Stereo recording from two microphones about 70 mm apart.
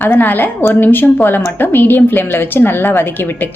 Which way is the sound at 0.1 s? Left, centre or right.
Left.